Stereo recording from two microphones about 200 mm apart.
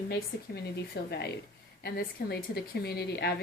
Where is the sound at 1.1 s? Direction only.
55° left (ahead or behind).